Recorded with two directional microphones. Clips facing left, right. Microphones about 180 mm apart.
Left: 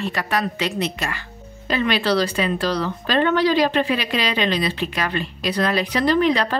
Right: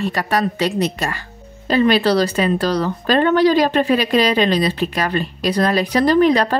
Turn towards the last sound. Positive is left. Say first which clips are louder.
# right 4 dB
turn(degrees=-45)  # may be behind; listen again after turning